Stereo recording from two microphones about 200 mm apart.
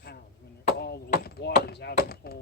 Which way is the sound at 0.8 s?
55° left (ahead or behind).